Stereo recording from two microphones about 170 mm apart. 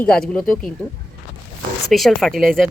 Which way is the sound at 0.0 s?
5° left (ahead or behind).